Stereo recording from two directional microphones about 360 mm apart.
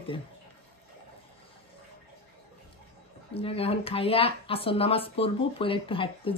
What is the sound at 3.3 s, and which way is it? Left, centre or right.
Speech, centre.